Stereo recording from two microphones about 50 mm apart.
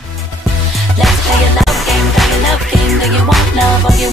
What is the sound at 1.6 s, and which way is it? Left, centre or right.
Music, centre.